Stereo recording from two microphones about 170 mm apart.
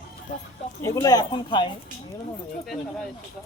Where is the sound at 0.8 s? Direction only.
20° left (ahead or behind).